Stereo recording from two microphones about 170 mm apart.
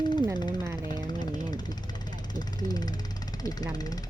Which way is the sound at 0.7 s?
25° left (ahead or behind).